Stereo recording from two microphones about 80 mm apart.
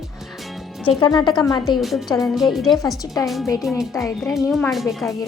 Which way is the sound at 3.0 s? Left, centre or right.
Left.